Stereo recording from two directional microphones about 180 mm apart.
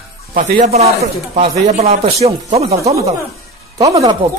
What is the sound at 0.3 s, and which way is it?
A man's voice, 50° right (ahead or behind).